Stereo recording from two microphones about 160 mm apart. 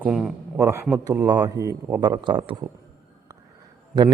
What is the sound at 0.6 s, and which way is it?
A man's voice, 15° right (ahead or behind).